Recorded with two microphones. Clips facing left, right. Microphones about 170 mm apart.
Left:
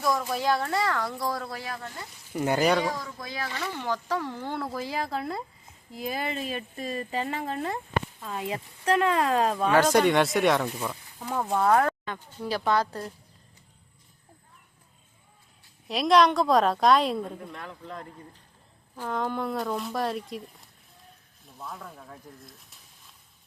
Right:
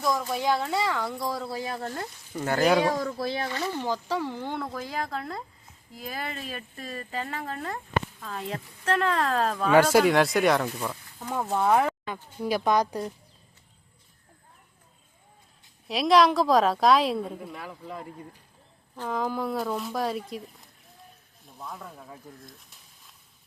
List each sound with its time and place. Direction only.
0.0 s a woman's voice: centre (ahead or behind)
1.5 s speech: 25° right (ahead or behind)
2.3 s speech: 15° left (ahead or behind)
3.2 s speech: 30° right (ahead or behind)
3.9 s a woman's voice: 5° right (ahead or behind)
9.7 s a woman's voice: 5° right (ahead or behind)
15.9 s a woman's voice: centre (ahead or behind)